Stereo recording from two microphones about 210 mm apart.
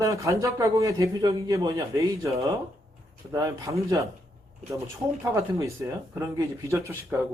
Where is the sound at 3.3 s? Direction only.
15° right (ahead or behind).